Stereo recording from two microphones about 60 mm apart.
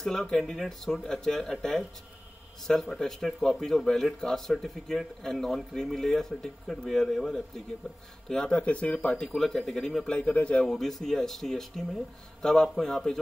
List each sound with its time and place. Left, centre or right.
0.0 s speech: centre
8.5 s speech: left
9.2 s speech: centre
10.1 s speech: centre
10.7 s a man's voice: centre